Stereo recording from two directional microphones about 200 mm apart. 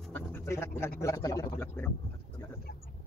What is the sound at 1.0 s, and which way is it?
Speech, 15° left (ahead or behind).